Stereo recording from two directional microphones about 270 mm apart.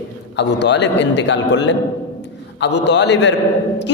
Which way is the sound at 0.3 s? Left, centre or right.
Left.